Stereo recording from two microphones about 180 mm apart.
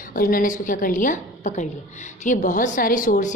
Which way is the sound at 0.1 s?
50° left (ahead or behind).